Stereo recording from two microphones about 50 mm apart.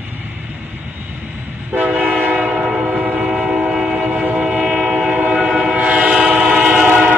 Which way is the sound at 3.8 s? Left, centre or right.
Right.